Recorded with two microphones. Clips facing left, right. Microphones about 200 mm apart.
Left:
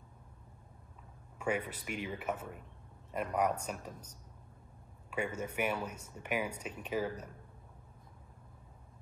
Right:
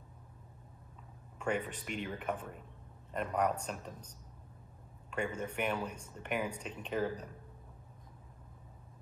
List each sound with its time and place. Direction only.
1.4 s speech: 10° left (ahead or behind)
5.1 s speech: 10° left (ahead or behind)